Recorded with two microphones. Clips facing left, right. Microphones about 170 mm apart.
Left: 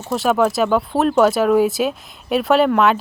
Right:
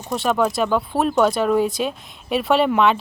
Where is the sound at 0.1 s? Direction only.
5° left (ahead or behind).